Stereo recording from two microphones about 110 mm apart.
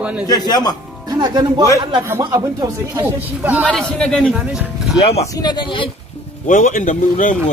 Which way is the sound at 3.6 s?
5° left (ahead or behind).